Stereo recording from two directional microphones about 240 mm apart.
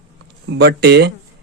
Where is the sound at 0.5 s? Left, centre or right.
Right.